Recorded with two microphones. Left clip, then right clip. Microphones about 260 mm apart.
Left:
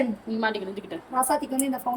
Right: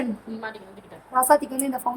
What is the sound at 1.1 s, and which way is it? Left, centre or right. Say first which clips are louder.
Speech: right 6 dB; centre.